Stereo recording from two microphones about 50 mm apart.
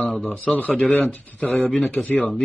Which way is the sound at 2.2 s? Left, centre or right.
Centre.